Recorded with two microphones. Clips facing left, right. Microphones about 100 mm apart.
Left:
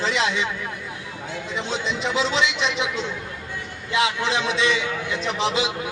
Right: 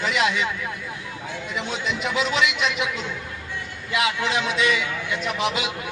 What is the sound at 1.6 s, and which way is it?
A man's voice, 25° left (ahead or behind).